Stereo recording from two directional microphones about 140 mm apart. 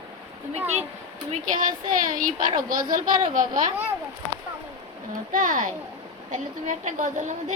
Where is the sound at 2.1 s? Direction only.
70° right (ahead or behind).